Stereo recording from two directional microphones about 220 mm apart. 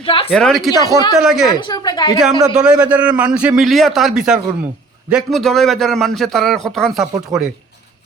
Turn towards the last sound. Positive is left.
turn(degrees=-5)  # may be behind; listen again after turning